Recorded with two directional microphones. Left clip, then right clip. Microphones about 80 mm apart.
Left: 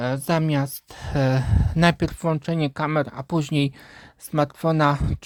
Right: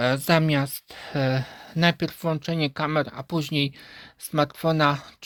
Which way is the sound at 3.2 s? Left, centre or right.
Left.